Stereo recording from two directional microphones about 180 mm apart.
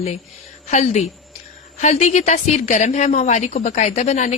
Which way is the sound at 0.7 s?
40° left (ahead or behind).